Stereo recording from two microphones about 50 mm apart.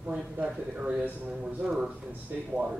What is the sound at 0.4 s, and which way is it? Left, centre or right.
Speech, right.